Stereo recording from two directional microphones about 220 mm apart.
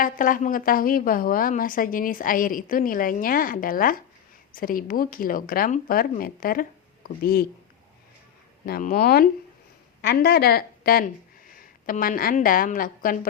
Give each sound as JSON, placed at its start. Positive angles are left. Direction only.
{"t": 0.0, "sound": "a woman's voice", "side_deg": 40}
{"t": 8.6, "sound": "speech", "side_deg": 40}